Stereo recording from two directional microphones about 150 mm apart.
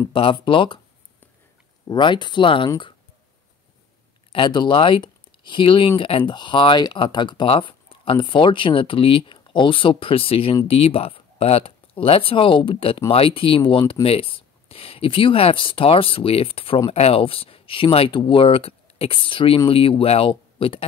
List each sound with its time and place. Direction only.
0.1 s speech: 35° left (ahead or behind)
1.9 s speech: 30° left (ahead or behind)
4.3 s speech: 30° left (ahead or behind)